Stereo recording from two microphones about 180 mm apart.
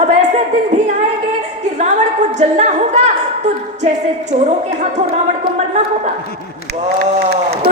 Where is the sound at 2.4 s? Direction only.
40° right (ahead or behind).